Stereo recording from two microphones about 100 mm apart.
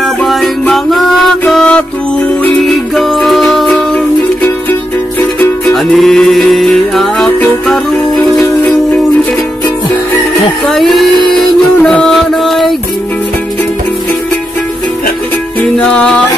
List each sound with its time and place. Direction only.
0.0 s music: centre (ahead or behind)
3.0 s music: centre (ahead or behind)
5.7 s music: 5° left (ahead or behind)
10.7 s a sound: centre (ahead or behind)
11.8 s music: 5° left (ahead or behind)
15.8 s music: 10° left (ahead or behind)